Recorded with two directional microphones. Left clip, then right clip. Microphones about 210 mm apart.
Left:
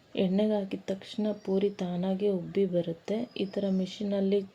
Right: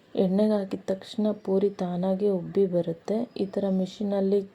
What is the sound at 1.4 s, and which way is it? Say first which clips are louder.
Speech: right 4 dB; 5° right (ahead or behind).